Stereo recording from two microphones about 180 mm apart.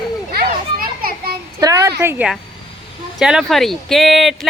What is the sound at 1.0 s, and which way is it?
Children playing, 55° right (ahead or behind).